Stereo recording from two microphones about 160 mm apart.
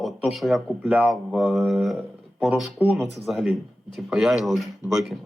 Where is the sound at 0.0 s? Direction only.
Centre (ahead or behind).